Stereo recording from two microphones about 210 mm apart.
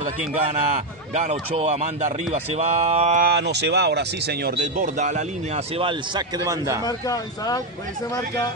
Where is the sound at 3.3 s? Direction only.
55° right (ahead or behind).